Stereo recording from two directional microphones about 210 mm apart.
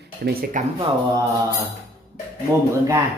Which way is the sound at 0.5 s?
25° right (ahead or behind).